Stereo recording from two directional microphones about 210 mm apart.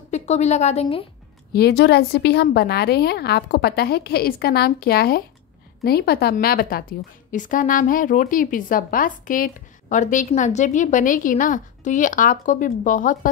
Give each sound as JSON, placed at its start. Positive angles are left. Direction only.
{"t": 0.1, "sound": "a woman's voice", "side_deg": 35}
{"t": 1.5, "sound": "a woman's voice", "side_deg": 50}